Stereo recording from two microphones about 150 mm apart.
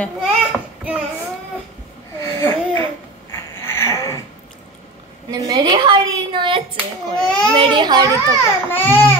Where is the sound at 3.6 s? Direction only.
15° left (ahead or behind).